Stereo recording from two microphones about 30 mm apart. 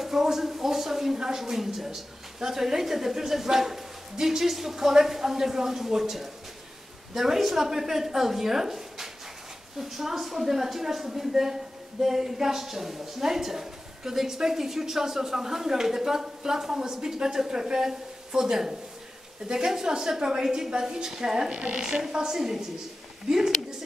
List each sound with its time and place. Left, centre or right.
0.0 s a sound: centre
1.1 s a woman's voice: right
1.4 s a woman's voice: centre
21.5 s speech: right
22.1 s a woman's voice: right